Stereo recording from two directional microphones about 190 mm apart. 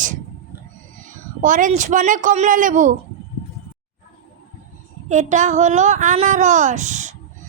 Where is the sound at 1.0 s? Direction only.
45° right (ahead or behind).